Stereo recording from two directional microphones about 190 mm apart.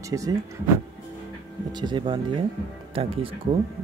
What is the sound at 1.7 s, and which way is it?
Speech, 25° right (ahead or behind).